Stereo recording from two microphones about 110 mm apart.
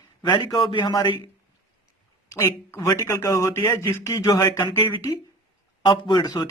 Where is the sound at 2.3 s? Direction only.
25° left (ahead or behind).